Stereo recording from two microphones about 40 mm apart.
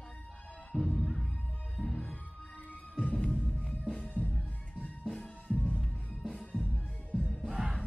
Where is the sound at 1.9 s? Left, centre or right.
Left.